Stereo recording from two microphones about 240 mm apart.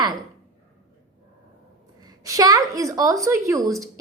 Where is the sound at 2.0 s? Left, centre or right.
Centre.